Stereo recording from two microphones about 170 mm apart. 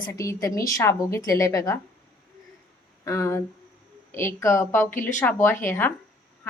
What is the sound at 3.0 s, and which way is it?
A woman's voice, 20° left (ahead or behind).